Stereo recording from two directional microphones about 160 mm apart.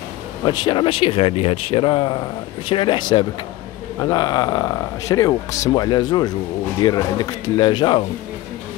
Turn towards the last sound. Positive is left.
turn(degrees=25)  # may be behind; listen again after turning